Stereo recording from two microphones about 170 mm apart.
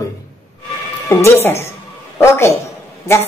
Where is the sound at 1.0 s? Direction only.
15° left (ahead or behind).